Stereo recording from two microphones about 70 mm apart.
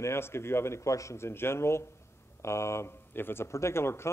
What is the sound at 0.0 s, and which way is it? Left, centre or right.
Speech, left.